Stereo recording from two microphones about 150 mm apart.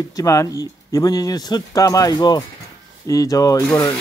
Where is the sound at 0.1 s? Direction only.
20° left (ahead or behind).